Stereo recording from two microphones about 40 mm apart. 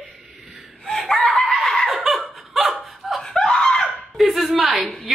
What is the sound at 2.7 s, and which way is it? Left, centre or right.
Laughter, centre.